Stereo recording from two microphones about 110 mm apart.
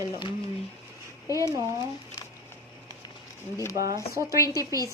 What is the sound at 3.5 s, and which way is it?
A woman's voice, 30° left (ahead or behind).